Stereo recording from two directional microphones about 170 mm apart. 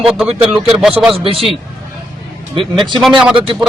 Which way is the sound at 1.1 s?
35° right (ahead or behind).